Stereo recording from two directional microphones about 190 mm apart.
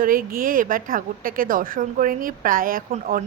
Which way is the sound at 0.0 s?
50° right (ahead or behind).